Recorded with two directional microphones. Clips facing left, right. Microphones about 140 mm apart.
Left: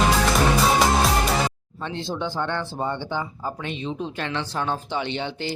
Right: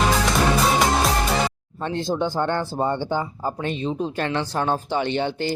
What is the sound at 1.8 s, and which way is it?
Speech, 45° right (ahead or behind).